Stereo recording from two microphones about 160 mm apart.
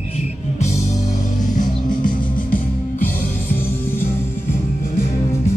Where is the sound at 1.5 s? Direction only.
55° left (ahead or behind).